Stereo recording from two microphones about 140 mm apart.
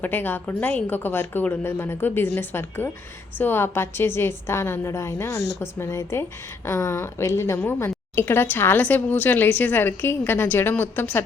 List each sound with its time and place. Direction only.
0.0 s a woman's voice: 15° left (ahead or behind)